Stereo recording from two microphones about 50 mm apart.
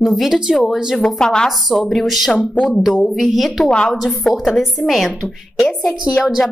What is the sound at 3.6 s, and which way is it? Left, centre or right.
Speech, centre.